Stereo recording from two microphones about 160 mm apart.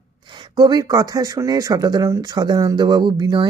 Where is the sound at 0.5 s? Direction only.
25° right (ahead or behind).